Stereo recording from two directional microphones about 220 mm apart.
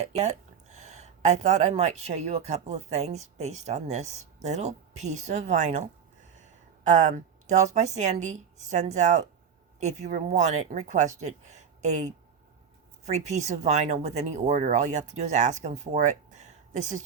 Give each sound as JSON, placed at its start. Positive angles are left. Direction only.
{"t": 0.0, "sound": "speech", "side_deg": -30}